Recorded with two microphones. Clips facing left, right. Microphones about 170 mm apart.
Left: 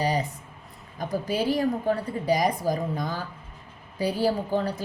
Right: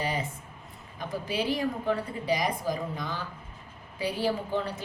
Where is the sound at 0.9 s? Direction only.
40° left (ahead or behind).